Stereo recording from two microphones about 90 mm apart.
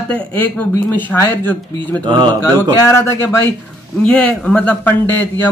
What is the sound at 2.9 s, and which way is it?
Speech, 30° left (ahead or behind).